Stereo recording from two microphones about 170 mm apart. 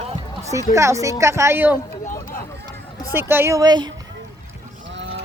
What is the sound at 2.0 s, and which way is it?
Run, 50° left (ahead or behind).